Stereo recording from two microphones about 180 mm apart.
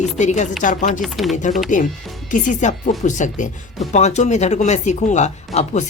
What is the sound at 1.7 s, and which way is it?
Speech, 45° left (ahead or behind).